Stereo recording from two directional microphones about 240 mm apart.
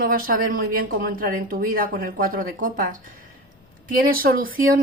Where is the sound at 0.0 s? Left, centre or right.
Right.